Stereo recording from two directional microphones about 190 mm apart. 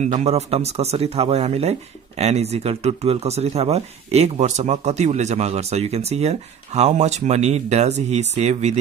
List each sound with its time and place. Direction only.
0.0 s speech: 35° right (ahead or behind)